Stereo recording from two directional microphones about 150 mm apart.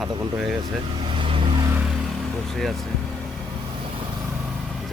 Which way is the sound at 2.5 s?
Centre (ahead or behind).